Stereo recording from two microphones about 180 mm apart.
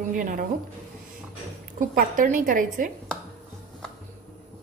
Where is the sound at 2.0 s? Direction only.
50° right (ahead or behind).